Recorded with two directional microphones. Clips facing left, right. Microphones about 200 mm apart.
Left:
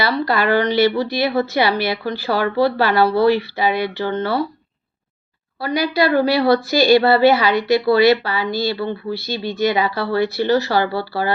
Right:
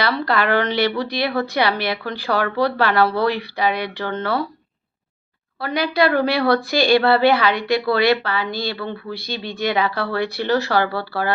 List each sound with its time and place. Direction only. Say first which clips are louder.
0.3 s a woman's voice: left 2 dB; 5° left (ahead or behind)
5.5 s a woman's voice: left 1 dB; 5° left (ahead or behind)